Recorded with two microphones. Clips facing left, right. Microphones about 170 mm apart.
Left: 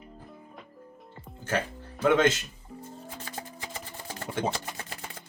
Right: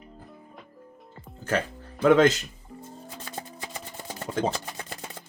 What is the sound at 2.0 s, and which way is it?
Speech, 40° right (ahead or behind).